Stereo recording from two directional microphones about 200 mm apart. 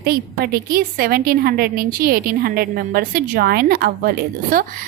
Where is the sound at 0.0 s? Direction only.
50° right (ahead or behind).